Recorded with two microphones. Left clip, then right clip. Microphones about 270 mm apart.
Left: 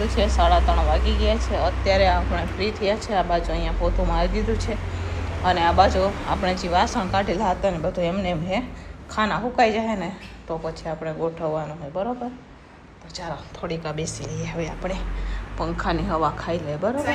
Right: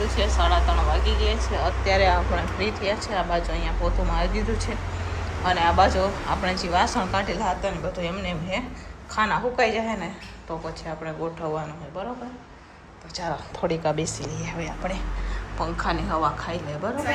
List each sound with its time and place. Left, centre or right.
0.3 s speech: centre
13.1 s a woman's voice: centre